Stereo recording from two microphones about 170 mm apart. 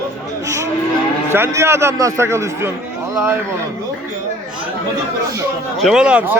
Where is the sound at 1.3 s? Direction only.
15° right (ahead or behind).